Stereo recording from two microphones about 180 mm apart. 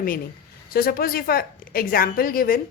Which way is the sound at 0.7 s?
55° left (ahead or behind).